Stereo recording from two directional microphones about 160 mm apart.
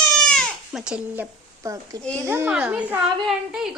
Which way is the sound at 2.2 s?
15° right (ahead or behind).